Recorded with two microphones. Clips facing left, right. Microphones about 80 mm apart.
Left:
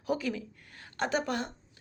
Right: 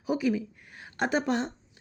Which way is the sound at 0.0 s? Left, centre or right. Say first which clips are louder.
Right 5 dB; centre.